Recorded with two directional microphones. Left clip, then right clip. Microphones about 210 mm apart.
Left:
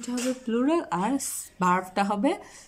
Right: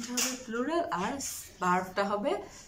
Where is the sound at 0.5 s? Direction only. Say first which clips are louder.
Left 7 dB; 40° left (ahead or behind).